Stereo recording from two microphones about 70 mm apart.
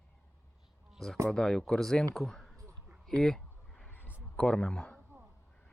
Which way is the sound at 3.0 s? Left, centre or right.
Centre.